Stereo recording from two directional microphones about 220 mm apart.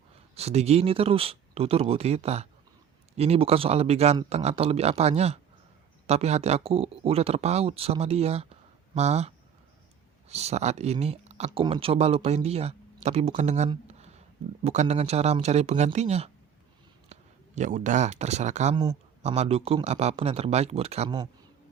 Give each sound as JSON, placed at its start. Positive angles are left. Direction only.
{"t": 0.3, "sound": "speech", "side_deg": -30}
{"t": 13.7, "sound": "a sound", "side_deg": -30}
{"t": 14.6, "sound": "speech", "side_deg": -30}